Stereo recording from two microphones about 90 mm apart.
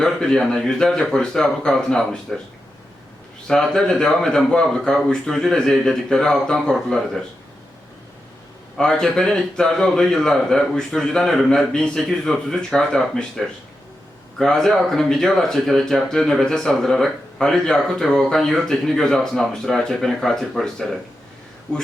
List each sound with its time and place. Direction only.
0.0 s a man's voice: 5° left (ahead or behind)
3.4 s a man's voice: 5° left (ahead or behind)
8.8 s a man's voice: 5° left (ahead or behind)